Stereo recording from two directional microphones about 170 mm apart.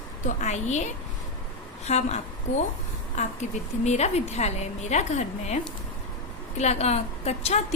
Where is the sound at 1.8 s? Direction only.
40° left (ahead or behind).